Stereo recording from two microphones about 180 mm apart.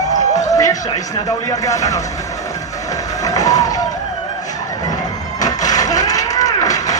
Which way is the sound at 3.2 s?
20° left (ahead or behind).